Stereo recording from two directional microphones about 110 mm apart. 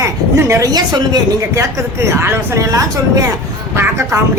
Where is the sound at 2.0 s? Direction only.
25° right (ahead or behind).